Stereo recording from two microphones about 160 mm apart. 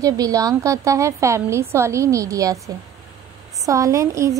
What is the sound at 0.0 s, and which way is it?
A woman's voice, 20° right (ahead or behind).